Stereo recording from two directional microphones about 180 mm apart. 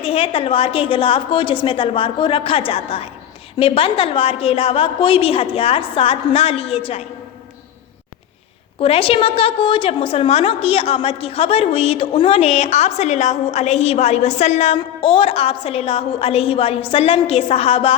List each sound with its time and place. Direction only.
0.0 s a woman's voice: 30° left (ahead or behind)
8.8 s a woman's voice: 30° left (ahead or behind)